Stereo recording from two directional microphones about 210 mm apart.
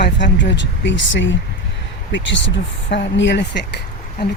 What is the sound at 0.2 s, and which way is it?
A woman's voice, 55° left (ahead or behind).